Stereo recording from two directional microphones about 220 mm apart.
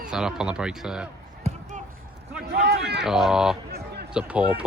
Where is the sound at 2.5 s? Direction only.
50° right (ahead or behind).